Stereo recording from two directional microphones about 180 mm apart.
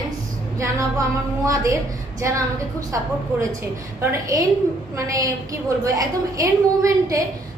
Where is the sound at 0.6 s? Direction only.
15° right (ahead or behind).